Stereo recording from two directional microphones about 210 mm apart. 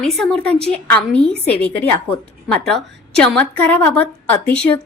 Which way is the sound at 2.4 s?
5° left (ahead or behind).